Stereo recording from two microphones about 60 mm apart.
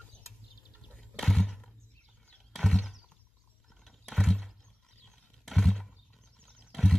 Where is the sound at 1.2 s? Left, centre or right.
Centre.